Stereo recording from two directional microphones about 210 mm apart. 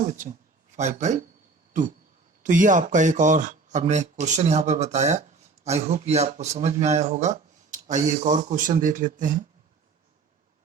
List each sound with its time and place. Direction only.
0.0 s speech: 35° right (ahead or behind)
2.4 s speech: 40° right (ahead or behind)